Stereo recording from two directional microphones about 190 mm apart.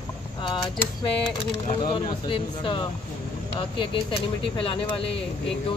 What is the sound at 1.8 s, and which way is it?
Speech, 25° left (ahead or behind).